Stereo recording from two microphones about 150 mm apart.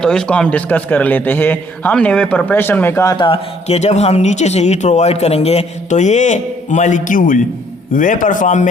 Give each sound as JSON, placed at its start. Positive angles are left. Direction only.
{"t": 0.0, "sound": "a man's voice", "side_deg": 5}
{"t": 3.2, "sound": "a man's voice", "side_deg": 40}